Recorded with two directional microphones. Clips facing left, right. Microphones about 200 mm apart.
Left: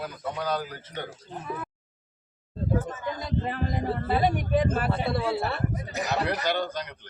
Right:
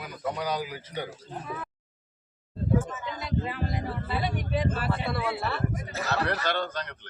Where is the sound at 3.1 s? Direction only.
50° left (ahead or behind).